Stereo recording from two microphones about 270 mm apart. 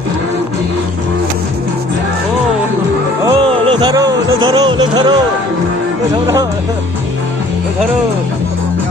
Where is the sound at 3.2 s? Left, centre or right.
Centre.